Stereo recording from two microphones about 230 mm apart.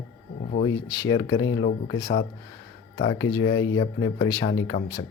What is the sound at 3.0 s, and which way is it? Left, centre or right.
Speech, centre.